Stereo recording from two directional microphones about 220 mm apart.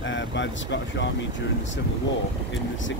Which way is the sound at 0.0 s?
55° left (ahead or behind).